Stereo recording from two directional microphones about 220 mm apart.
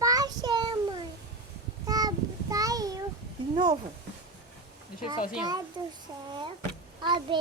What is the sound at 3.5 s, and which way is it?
Speech, 20° right (ahead or behind).